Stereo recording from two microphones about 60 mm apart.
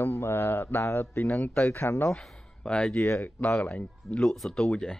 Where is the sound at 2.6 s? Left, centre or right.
Centre.